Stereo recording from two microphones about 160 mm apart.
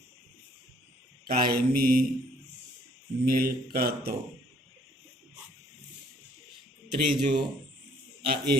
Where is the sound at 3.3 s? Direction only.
70° right (ahead or behind).